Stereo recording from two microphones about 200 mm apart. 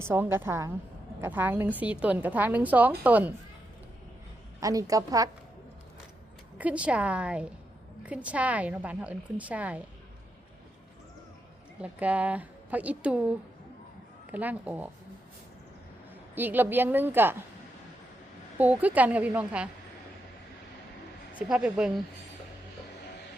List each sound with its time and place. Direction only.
0.0 s a woman's voice: 10° right (ahead or behind)
4.6 s a woman's voice: 15° right (ahead or behind)
6.6 s a woman's voice: 5° right (ahead or behind)
11.8 s a woman's voice: 5° right (ahead or behind)
16.3 s a woman's voice: 10° right (ahead or behind)
18.5 s a woman's voice: 10° right (ahead or behind)
21.3 s a woman's voice: 5° right (ahead or behind)